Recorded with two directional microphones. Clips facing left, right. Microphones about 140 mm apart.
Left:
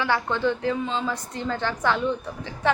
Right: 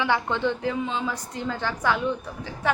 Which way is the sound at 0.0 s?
15° right (ahead or behind).